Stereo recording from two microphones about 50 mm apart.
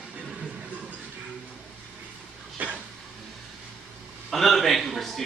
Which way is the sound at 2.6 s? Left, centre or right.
Right.